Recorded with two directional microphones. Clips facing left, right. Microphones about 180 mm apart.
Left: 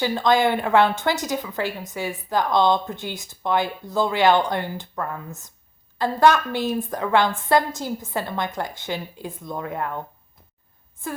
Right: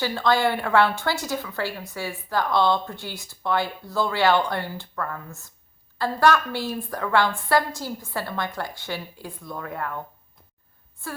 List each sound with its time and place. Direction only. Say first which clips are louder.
0.0 s a woman's voice: left 3 dB; 20° left (ahead or behind)